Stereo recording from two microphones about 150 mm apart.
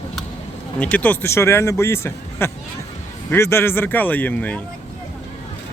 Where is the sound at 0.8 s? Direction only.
10° left (ahead or behind).